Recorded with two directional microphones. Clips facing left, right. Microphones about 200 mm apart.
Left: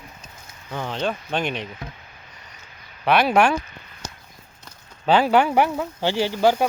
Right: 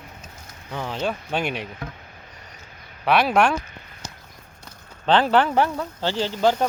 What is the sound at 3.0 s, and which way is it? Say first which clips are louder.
Speech: left 1 dB; centre (ahead or behind).